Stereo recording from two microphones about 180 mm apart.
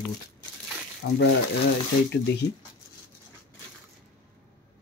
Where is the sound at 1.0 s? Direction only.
65° left (ahead or behind).